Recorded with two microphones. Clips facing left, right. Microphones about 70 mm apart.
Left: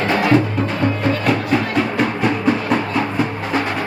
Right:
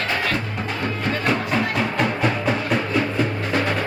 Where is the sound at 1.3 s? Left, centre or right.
Centre.